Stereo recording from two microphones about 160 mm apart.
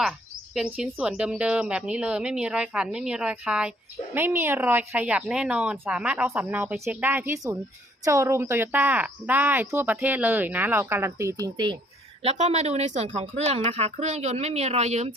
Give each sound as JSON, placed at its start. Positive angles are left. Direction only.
{"t": 0.5, "sound": "speech", "side_deg": -5}
{"t": 12.2, "sound": "speech", "side_deg": -40}